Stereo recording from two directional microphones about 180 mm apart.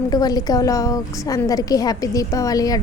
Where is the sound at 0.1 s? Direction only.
20° left (ahead or behind).